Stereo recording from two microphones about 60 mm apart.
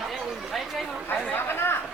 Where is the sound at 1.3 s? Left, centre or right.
Left.